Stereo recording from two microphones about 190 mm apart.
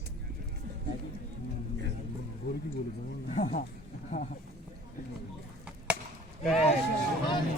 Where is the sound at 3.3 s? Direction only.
35° left (ahead or behind).